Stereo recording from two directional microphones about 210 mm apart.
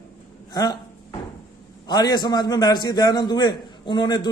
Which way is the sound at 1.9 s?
20° left (ahead or behind).